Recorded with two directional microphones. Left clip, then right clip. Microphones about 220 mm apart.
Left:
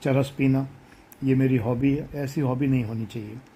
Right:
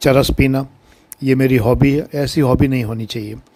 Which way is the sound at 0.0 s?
30° right (ahead or behind).